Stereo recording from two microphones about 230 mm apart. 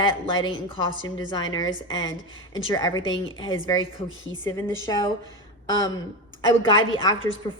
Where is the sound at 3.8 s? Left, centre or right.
Left.